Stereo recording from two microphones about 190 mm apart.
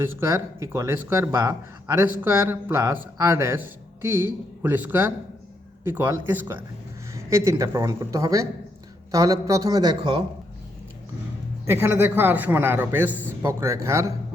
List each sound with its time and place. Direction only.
0.0 s a man's voice: 15° right (ahead or behind)
11.6 s speech: 10° right (ahead or behind)